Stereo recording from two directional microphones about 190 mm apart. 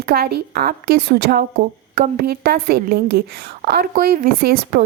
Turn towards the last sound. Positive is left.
turn(degrees=-50)  # may be behind; listen again after turning